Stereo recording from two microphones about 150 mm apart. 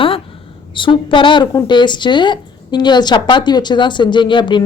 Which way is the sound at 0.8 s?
35° left (ahead or behind).